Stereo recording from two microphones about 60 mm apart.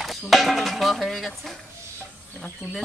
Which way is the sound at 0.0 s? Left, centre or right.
Centre.